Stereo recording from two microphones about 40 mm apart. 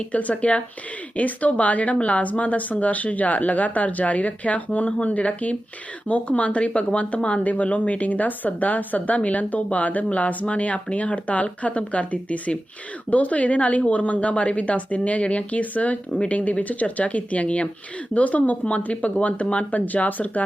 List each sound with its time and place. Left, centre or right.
0.1 s a woman's voice: left
7.4 s a woman's voice: left